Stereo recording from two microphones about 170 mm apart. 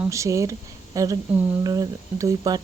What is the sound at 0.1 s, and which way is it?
Speech, 20° right (ahead or behind).